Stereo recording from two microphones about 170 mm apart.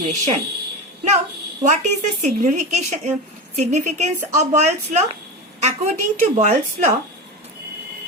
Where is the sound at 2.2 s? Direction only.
45° right (ahead or behind).